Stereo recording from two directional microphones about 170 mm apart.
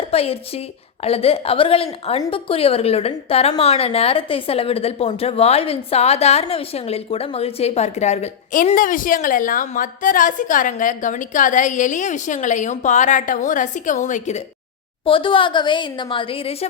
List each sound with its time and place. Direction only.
0.1 s a woman's voice: 35° left (ahead or behind)
8.7 s a woman's voice: 55° left (ahead or behind)
15.0 s a woman's voice: 30° left (ahead or behind)